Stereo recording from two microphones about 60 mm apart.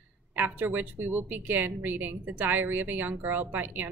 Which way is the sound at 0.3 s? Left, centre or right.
Right.